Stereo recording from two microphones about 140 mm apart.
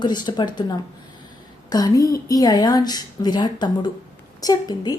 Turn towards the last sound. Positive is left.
turn(degrees=25)  # may be behind; listen again after turning